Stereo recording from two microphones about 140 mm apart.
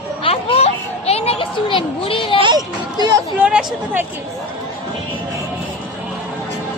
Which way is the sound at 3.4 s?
10° right (ahead or behind).